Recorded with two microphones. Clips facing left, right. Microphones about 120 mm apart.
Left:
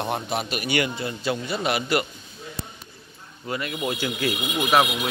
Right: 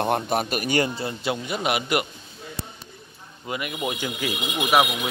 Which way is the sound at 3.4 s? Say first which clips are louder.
Left 1 dB; 15° right (ahead or behind).